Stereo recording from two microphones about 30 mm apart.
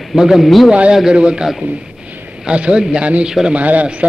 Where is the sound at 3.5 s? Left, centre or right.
Right.